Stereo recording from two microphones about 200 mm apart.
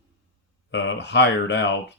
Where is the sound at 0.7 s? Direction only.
60° left (ahead or behind).